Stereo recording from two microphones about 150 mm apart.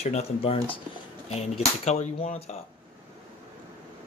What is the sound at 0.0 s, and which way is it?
Speech, 40° left (ahead or behind).